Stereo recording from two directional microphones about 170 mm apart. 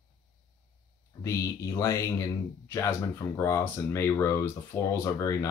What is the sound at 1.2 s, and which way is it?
Speech, 15° left (ahead or behind).